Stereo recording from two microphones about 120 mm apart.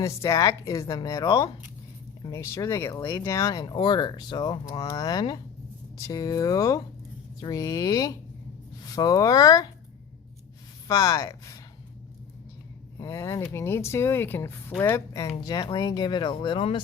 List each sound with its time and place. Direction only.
0.0 s a woman's voice: 25° left (ahead or behind)
10.8 s a woman's voice: 30° left (ahead or behind)
13.0 s a woman's voice: 25° left (ahead or behind); by 16.8 s 45° left (ahead or behind)